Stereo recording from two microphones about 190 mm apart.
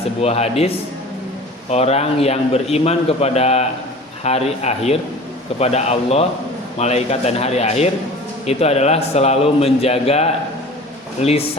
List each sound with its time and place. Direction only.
0.2 s a man's voice: 35° left (ahead or behind)